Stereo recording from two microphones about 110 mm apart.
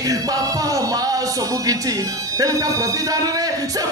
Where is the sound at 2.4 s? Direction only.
30° right (ahead or behind).